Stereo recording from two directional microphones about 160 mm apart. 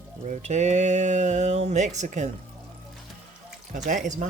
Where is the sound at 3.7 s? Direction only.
50° right (ahead or behind).